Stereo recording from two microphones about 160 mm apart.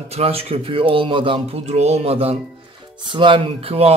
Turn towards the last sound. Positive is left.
turn(degrees=-35)  # may be behind; listen again after turning